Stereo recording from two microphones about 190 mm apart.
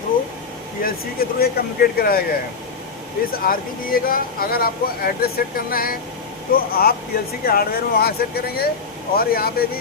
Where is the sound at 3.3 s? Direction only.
50° left (ahead or behind).